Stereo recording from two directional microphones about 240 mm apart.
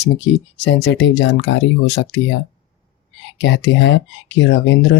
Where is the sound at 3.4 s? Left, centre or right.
Left.